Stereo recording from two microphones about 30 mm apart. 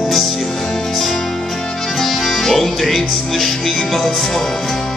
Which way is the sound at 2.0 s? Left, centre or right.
Centre.